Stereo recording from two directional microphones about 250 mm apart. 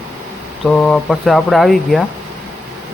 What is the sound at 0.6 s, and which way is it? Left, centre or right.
Speech, centre.